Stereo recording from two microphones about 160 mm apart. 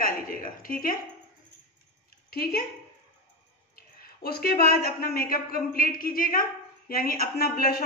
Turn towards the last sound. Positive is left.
turn(degrees=70)  # may be behind; listen again after turning